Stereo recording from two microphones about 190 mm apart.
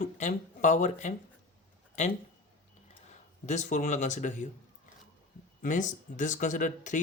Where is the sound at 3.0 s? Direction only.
40° left (ahead or behind).